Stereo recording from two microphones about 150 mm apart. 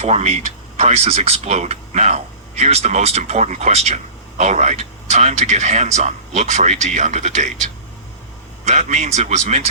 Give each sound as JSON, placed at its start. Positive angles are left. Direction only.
{"t": 0.0, "sound": "speech", "side_deg": -45}